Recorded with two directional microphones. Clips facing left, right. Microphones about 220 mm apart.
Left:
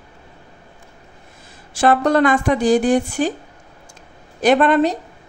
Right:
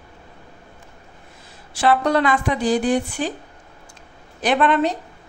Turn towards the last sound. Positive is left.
turn(degrees=40)  # may be behind; listen again after turning